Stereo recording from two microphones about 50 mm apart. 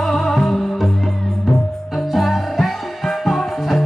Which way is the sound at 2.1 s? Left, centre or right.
Centre.